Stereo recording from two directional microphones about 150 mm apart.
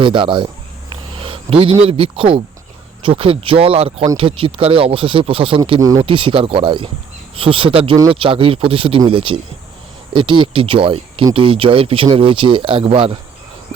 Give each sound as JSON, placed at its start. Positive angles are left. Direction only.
{"t": 0.0, "sound": "speech", "side_deg": -35}
{"t": 1.2, "sound": "a sound", "side_deg": -40}
{"t": 1.8, "sound": "speech", "side_deg": -40}